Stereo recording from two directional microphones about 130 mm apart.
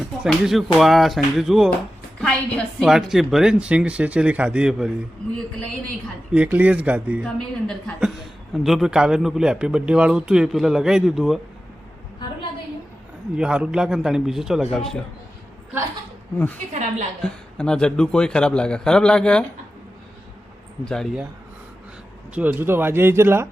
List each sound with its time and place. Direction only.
0.0 s a man's voice: 5° right (ahead or behind)
6.3 s speech: 10° right (ahead or behind)
7.3 s a man's voice: 5° left (ahead or behind)
13.3 s a man's voice: 10° right (ahead or behind)
16.7 s a woman's voice: 65° right (ahead or behind)
17.2 s a man's voice: 5° left (ahead or behind)
20.8 s a man's voice: 5° left (ahead or behind)
22.4 s speech: 15° right (ahead or behind)